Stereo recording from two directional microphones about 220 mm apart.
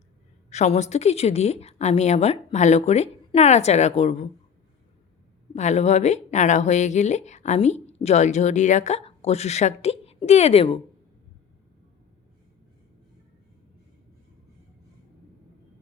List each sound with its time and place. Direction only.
0.5 s a woman's voice: 30° left (ahead or behind)
5.5 s a woman's voice: 30° left (ahead or behind)